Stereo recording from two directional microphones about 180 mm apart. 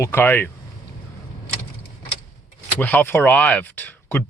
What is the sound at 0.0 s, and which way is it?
Speech, 15° left (ahead or behind).